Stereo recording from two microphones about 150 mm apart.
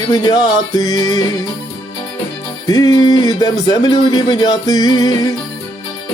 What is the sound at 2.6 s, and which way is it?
Music, 25° left (ahead or behind).